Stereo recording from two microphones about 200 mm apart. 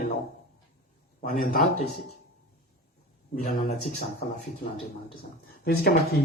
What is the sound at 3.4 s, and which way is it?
Speech, 40° left (ahead or behind).